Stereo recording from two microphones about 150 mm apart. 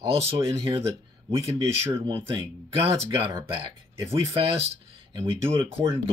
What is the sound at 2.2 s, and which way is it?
Speech, 35° right (ahead or behind).